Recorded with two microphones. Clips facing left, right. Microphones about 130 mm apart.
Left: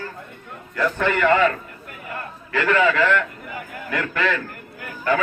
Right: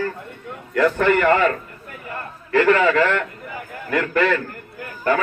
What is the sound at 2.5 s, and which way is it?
A man's voice, 40° right (ahead or behind).